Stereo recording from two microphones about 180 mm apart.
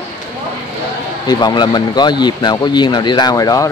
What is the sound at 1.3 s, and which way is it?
Speech, 25° left (ahead or behind).